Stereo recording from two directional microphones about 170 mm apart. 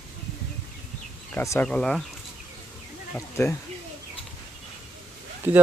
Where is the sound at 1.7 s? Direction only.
5° left (ahead or behind).